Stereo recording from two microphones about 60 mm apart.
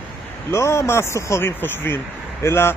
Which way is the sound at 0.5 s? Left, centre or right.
Left.